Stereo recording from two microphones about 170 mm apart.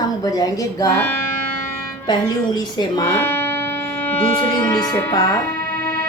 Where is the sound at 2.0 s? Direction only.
25° left (ahead or behind).